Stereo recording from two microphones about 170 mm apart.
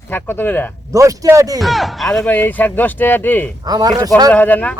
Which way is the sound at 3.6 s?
20° right (ahead or behind).